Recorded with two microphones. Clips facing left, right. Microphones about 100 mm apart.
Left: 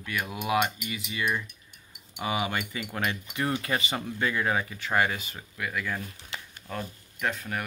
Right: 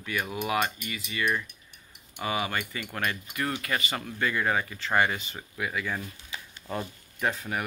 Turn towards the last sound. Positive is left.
turn(degrees=-5)  # may be behind; listen again after turning